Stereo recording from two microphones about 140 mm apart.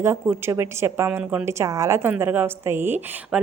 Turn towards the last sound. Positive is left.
turn(degrees=-15)  # may be behind; listen again after turning